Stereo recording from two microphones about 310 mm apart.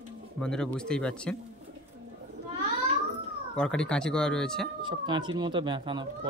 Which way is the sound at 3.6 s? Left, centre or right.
Centre.